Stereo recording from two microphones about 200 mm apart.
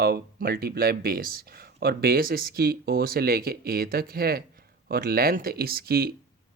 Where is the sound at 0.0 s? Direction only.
50° right (ahead or behind).